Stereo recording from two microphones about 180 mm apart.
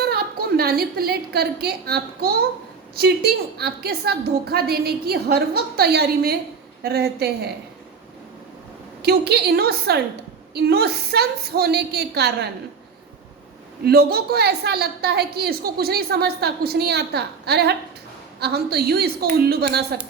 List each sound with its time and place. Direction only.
0.0 s a woman's voice: 60° right (ahead or behind)
9.0 s a woman's voice: 65° right (ahead or behind)
13.8 s a woman's voice: 60° right (ahead or behind)